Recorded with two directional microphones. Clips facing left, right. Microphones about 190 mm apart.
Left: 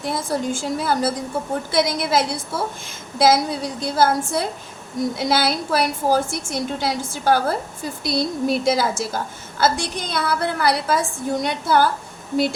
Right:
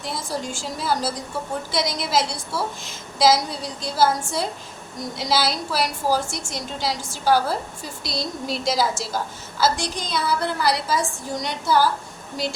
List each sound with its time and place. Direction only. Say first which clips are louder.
0.0 s a woman's voice: left 5 dB; 55° left (ahead or behind)